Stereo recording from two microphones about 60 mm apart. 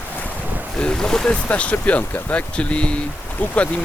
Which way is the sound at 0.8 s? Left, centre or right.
Centre.